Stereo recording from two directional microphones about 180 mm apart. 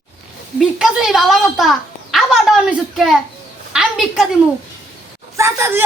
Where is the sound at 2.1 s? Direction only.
Centre (ahead or behind).